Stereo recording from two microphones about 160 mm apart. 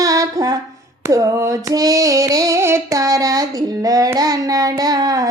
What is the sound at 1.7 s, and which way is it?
Child singing, 20° right (ahead or behind).